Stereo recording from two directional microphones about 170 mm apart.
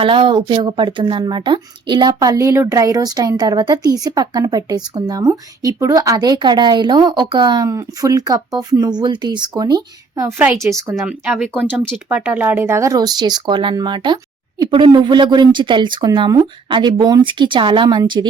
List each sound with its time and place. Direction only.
0.0 s speech: 30° right (ahead or behind)